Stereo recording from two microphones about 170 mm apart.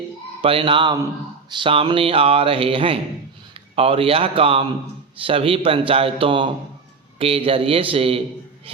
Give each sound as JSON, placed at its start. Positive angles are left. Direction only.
{"t": 0.4, "sound": "a man's voice", "side_deg": -30}